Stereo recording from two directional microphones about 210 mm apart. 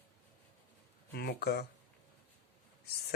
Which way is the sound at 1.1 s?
50° left (ahead or behind).